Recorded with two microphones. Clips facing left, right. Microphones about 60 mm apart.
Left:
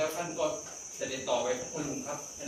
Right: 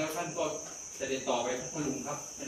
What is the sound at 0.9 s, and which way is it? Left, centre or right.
Speech, centre.